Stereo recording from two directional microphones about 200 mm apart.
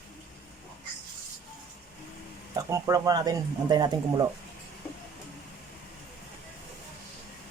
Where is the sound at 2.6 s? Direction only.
15° right (ahead or behind).